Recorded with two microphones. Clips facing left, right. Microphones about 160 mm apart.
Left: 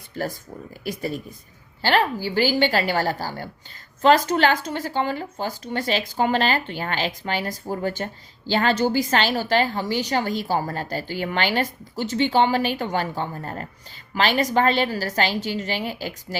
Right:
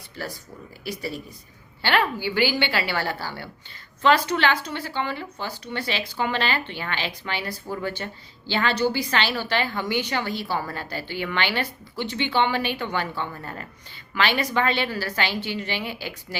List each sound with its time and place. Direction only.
0.1 s a woman's voice: 45° left (ahead or behind)